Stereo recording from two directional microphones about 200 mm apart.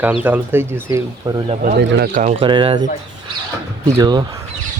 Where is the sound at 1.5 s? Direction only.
45° right (ahead or behind).